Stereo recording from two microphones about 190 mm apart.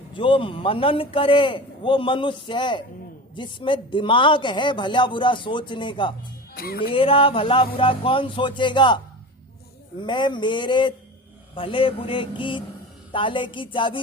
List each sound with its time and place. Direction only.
0.1 s speech: 25° left (ahead or behind)
6.5 s speech: 50° left (ahead or behind)
6.9 s speech: 30° left (ahead or behind)
10.0 s speech: 25° left (ahead or behind)